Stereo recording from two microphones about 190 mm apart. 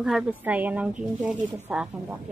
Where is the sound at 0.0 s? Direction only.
5° right (ahead or behind).